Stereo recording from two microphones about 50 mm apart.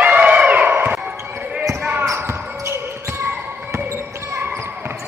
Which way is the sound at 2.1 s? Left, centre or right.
Right.